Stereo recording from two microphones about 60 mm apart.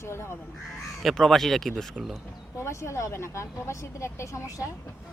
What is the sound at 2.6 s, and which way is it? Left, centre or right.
Speech, left.